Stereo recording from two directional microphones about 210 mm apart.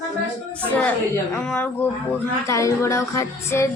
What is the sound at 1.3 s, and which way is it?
Music, 10° left (ahead or behind).